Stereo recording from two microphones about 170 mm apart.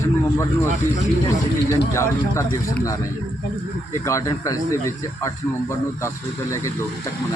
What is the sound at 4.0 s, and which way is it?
Speech, 15° left (ahead or behind).